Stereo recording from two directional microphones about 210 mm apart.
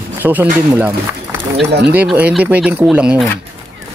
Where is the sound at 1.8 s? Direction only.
5° right (ahead or behind).